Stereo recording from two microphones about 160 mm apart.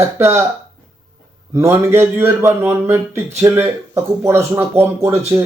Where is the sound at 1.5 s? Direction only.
15° right (ahead or behind).